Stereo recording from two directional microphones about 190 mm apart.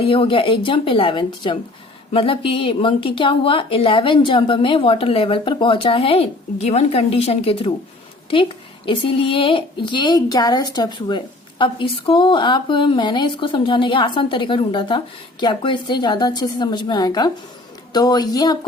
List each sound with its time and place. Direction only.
0.0 s speech: 30° left (ahead or behind)